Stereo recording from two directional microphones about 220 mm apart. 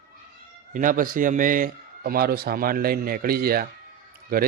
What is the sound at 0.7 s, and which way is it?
A man's voice, 40° right (ahead or behind).